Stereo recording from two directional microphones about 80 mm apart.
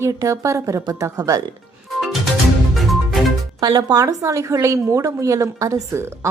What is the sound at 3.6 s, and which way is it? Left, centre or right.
A woman's voice, right.